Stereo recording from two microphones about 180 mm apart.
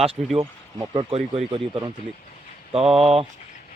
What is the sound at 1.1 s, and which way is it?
Speech, 35° right (ahead or behind).